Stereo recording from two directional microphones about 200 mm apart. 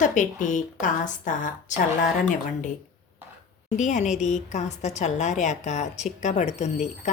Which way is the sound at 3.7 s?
35° left (ahead or behind).